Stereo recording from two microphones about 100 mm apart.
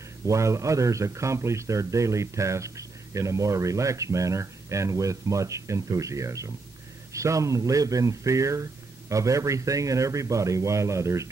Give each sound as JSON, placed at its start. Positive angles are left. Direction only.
{"t": 0.2, "sound": "speech", "side_deg": -30}